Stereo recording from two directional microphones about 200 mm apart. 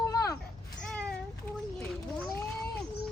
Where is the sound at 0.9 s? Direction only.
5° left (ahead or behind).